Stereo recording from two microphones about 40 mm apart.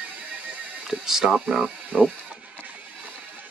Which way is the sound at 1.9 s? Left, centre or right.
Right.